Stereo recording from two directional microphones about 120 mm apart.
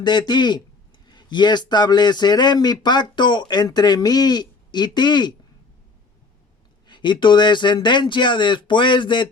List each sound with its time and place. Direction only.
0.0 s speech: 40° left (ahead or behind)
6.8 s speech: 40° left (ahead or behind)